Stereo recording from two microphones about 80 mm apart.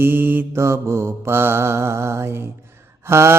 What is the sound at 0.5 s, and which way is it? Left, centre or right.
Mantra, right.